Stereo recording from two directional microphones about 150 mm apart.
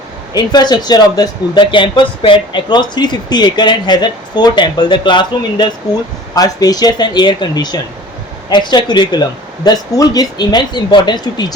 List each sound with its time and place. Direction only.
0.3 s speech: 30° left (ahead or behind)